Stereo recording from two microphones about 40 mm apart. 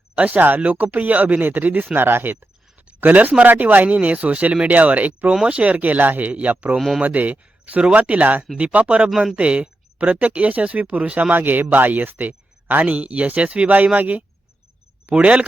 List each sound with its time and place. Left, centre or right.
0.2 s speech: right
2.0 s speech: right
2.7 s a sound: right
3.4 s speech: right
5.5 s speech: right
5.7 s speech: right
6.7 s speech: centre
7.0 s speech: right
9.0 s speech: centre
9.3 s speech: right
11.3 s speech: right